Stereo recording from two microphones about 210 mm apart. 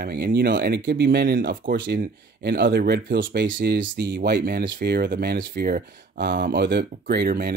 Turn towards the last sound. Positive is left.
turn(degrees=-45)  # may be behind; listen again after turning